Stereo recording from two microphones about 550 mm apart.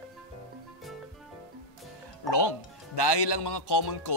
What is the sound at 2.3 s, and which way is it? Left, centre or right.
A man's voice, left.